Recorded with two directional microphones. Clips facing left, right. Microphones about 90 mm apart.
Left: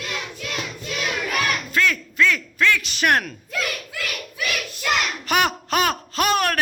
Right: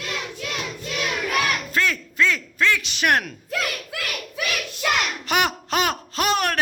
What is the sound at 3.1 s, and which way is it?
Speech, 10° right (ahead or behind).